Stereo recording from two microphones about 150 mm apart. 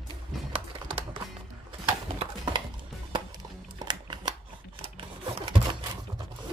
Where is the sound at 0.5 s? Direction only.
35° right (ahead or behind).